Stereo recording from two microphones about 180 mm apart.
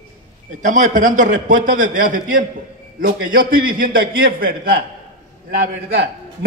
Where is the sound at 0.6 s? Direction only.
45° right (ahead or behind).